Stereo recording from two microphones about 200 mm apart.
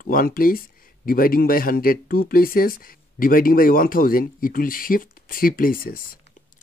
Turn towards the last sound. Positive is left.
turn(degrees=45)  # may be behind; listen again after turning